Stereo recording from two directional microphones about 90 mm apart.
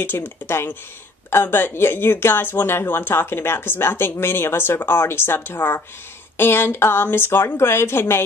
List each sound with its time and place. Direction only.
0.0 s speech: 25° left (ahead or behind)